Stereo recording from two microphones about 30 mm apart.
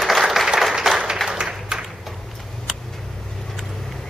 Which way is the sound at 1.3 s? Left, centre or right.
Right.